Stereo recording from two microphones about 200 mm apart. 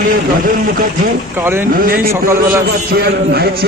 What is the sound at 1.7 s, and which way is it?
A man's voice, 45° right (ahead or behind).